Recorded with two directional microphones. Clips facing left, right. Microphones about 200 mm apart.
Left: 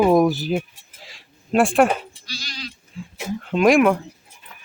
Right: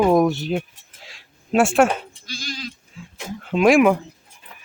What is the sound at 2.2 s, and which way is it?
Sheep, 50° right (ahead or behind).